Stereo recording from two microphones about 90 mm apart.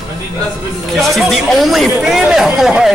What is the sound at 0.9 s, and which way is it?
Speech, centre (ahead or behind).